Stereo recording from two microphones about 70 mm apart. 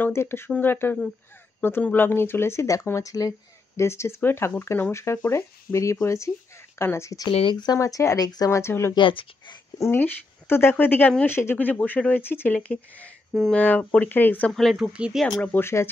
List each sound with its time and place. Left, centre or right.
0.1 s speech: left
7.1 s speech: left
8.2 s speech: left
8.5 s speech: left
11.2 s speech: left
11.5 s speech: left
12.5 s speech: centre
14.5 s speech: centre
14.8 s speech: centre
15.1 s speech: centre
15.6 s speech: left